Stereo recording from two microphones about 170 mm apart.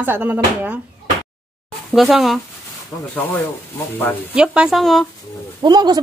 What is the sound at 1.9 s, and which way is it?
Speech, centre (ahead or behind).